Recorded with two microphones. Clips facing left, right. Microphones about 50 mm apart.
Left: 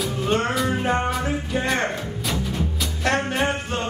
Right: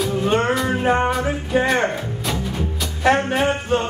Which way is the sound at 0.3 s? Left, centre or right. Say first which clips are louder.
Right 1 dB; centre.